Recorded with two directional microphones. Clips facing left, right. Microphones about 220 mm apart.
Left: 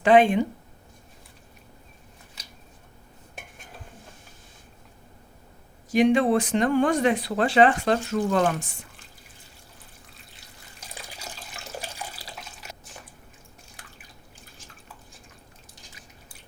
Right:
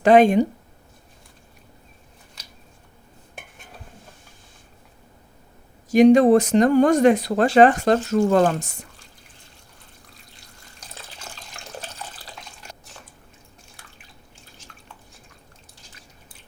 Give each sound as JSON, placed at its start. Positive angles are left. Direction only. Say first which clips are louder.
{"t": 0.0, "sound": "speech", "louder": "right 4 dB", "side_deg": -40}
{"t": 5.9, "sound": "speech", "louder": "right 7 dB", "side_deg": -40}
{"t": 10.8, "sound": "water tap", "louder": "left 1 dB", "side_deg": 10}
{"t": 11.5, "sound": "water", "louder": "even", "side_deg": 10}